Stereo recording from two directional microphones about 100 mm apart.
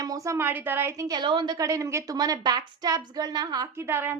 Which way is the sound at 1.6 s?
30° right (ahead or behind).